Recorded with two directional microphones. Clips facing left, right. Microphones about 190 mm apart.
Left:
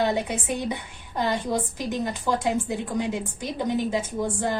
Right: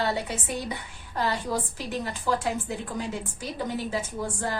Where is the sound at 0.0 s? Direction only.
15° left (ahead or behind).